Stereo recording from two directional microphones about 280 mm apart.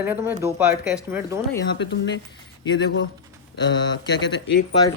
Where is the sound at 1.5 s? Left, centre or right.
Left.